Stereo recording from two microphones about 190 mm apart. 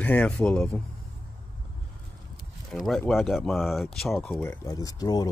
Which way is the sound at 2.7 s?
5° left (ahead or behind).